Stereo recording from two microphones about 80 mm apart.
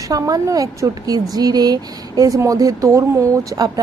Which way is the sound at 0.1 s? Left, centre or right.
Right.